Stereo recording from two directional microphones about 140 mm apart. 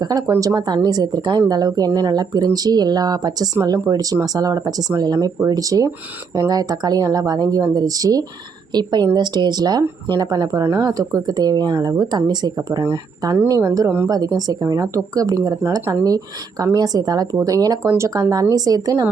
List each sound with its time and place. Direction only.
0.0 s speech: 30° right (ahead or behind)